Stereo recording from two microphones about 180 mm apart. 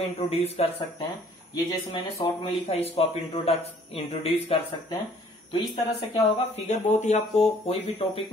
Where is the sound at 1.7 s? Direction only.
25° left (ahead or behind).